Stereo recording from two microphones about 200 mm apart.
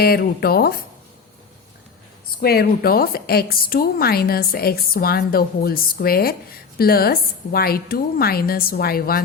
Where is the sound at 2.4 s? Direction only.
50° left (ahead or behind).